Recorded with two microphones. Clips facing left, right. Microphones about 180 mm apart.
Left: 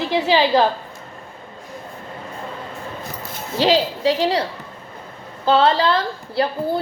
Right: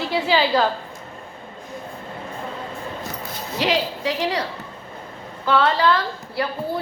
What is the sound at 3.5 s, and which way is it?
A woman's voice, 30° left (ahead or behind).